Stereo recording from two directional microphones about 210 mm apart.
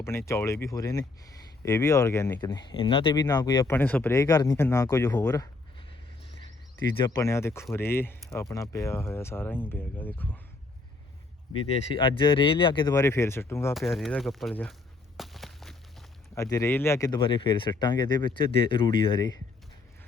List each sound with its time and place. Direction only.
0.0 s speech: 10° left (ahead or behind)
7.0 s speech: 15° left (ahead or behind)
11.7 s speech: 25° left (ahead or behind)
13.7 s speech: centre (ahead or behind)
15.2 s a sound: centre (ahead or behind)
16.3 s speech: 15° left (ahead or behind)